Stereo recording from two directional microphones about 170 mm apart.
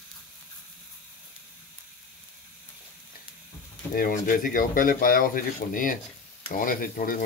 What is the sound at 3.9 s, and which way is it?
Speech, 60° left (ahead or behind).